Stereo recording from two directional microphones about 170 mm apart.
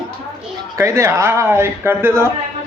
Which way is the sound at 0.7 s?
15° right (ahead or behind).